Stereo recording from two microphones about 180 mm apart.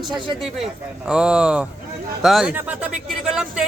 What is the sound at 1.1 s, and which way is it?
Speech, 5° right (ahead or behind).